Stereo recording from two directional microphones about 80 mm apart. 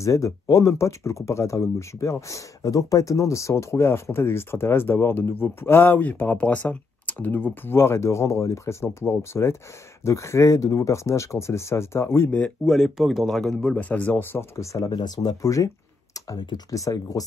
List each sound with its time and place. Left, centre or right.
0.0 s speech: left
12.3 s speech: centre
12.6 s speech: centre
14.3 s speech: left
14.9 s speech: left
16.3 s speech: left
16.7 s speech: left